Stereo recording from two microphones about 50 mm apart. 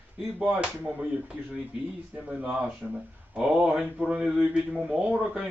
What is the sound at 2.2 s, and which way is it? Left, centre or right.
Speech, right.